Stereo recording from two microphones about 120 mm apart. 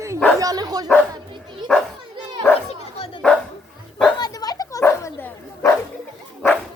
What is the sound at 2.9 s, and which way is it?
Dog, 55° left (ahead or behind).